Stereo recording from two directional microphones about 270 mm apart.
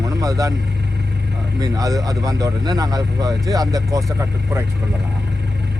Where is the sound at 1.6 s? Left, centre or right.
Centre.